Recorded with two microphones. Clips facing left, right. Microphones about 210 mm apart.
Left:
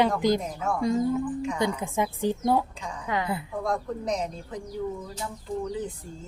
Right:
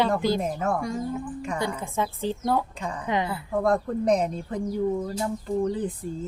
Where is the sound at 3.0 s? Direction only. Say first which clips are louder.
Right 3 dB; 20° right (ahead or behind).